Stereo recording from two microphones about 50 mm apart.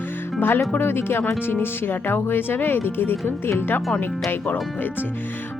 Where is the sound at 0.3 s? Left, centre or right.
Left.